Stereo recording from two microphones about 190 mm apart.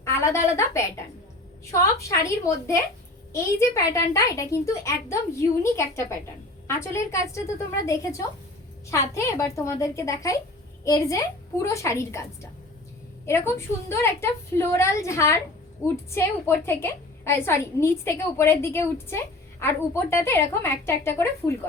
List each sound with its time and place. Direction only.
0.0 s a woman's voice: 15° left (ahead or behind)
3.9 s a woman's voice: 15° left (ahead or behind)